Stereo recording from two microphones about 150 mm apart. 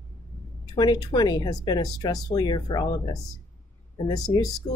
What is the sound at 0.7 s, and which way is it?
Speech, 30° left (ahead or behind).